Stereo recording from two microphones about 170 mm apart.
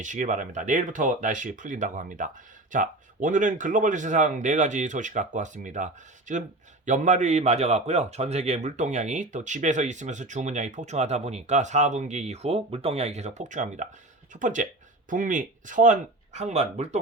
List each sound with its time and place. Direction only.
0.0 s a man's voice: 45° right (ahead or behind)